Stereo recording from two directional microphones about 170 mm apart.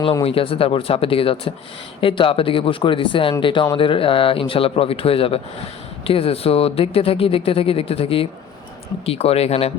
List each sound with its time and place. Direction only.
0.0 s speech: 30° left (ahead or behind)